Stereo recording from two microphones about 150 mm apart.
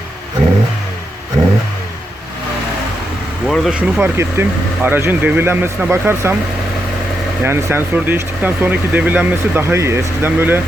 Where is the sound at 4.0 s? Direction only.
15° right (ahead or behind).